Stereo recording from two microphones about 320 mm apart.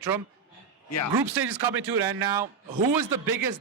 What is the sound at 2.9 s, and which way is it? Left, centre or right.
Speech, right.